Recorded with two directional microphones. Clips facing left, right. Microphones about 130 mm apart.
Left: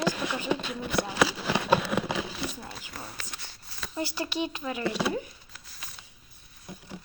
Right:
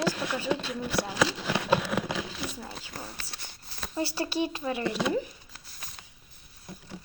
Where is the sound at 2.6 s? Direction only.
30° right (ahead or behind).